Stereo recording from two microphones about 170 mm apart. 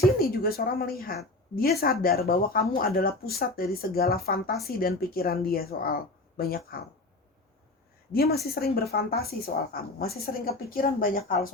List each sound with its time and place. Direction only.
0.2 s a woman's voice: 60° left (ahead or behind)
8.1 s a woman's voice: 65° left (ahead or behind)